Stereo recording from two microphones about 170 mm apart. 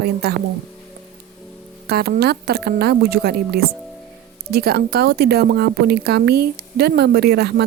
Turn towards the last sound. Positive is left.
turn(degrees=-70)  # may be behind; listen again after turning